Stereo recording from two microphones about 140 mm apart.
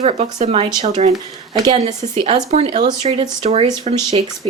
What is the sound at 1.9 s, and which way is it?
Speech, 30° right (ahead or behind).